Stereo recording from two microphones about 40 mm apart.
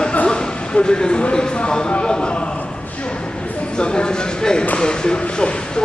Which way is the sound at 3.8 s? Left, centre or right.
Left.